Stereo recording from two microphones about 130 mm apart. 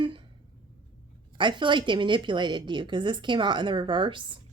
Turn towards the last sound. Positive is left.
turn(degrees=-40)  # may be behind; listen again after turning